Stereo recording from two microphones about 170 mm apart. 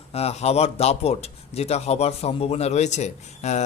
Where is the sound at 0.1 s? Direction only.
35° left (ahead or behind).